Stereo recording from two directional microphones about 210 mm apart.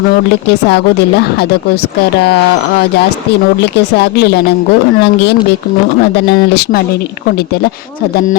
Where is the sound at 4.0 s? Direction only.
50° left (ahead or behind).